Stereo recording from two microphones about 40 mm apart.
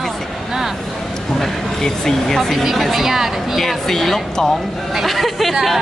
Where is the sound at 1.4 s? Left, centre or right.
Centre.